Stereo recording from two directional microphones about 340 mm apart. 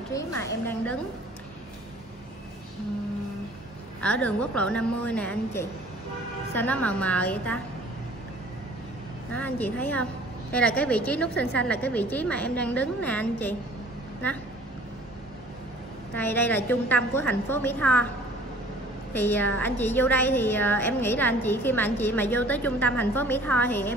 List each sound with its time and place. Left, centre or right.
0.1 s a woman's voice: centre
4.0 s a woman's voice: centre
9.3 s a woman's voice: centre
16.2 s a woman's voice: centre
19.1 s a woman's voice: centre